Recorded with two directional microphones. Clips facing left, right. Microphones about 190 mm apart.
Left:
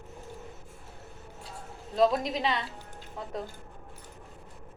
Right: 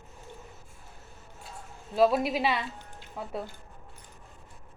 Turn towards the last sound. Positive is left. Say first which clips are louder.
# right 1 dB
turn(degrees=-5)  # may be behind; listen again after turning